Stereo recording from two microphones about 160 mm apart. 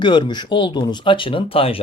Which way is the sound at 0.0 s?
30° left (ahead or behind).